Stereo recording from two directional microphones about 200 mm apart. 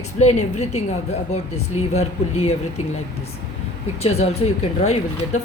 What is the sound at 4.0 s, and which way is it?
Speech, 30° left (ahead or behind).